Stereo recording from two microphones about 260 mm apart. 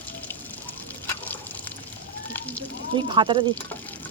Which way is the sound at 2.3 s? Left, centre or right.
Centre.